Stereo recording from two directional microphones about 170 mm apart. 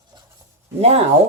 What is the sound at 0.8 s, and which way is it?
Speech, 35° right (ahead or behind).